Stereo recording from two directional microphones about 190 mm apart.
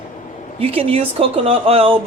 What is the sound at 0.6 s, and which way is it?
Speech, 30° right (ahead or behind).